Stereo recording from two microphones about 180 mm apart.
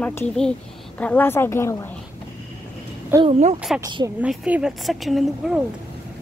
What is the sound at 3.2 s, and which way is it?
Speech, 40° right (ahead or behind).